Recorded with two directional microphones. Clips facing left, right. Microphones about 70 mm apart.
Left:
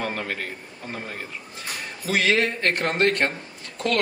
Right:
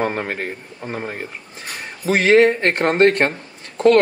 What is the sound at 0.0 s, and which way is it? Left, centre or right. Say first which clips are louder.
Speech: right 6 dB; right.